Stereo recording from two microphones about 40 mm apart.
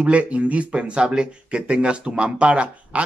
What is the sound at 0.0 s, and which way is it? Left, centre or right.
Speech, right.